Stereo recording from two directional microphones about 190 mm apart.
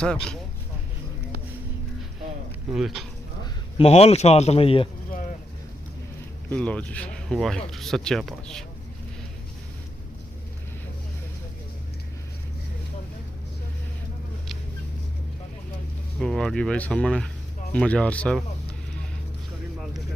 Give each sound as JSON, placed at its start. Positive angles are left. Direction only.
{"t": 0.0, "sound": "speech", "side_deg": 5}
{"t": 2.7, "sound": "speech", "side_deg": 0}
{"t": 3.4, "sound": "a man's voice", "side_deg": 30}
{"t": 6.5, "sound": "speech", "side_deg": 5}
{"t": 16.2, "sound": "speech", "side_deg": 5}